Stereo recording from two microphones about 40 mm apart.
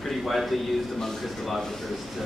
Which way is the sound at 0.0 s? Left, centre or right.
Centre.